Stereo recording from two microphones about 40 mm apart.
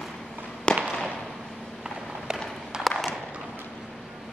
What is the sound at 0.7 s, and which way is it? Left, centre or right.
Fireworks, left.